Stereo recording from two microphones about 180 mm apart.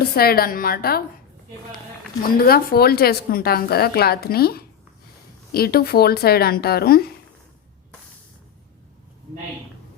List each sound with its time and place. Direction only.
0.2 s speech: 55° left (ahead or behind)
2.4 s speech: 55° left (ahead or behind)